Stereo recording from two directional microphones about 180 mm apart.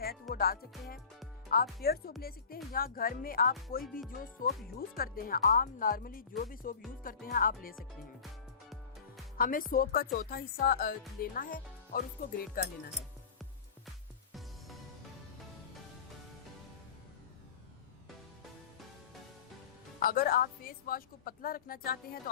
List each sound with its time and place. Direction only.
0.0 s music: 55° left (ahead or behind)
1.5 s speech: 55° left (ahead or behind)
9.4 s speech: 50° left (ahead or behind)
20.0 s speech: 55° left (ahead or behind)